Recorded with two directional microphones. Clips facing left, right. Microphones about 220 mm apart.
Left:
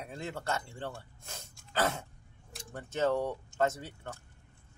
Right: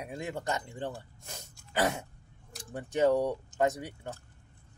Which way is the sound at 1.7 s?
15° right (ahead or behind).